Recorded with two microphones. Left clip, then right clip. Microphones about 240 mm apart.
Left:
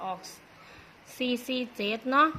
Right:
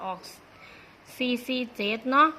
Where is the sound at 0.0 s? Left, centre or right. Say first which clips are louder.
Right 1 dB; centre.